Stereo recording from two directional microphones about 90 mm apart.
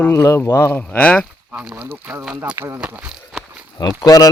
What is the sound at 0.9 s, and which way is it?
Speech, 15° left (ahead or behind).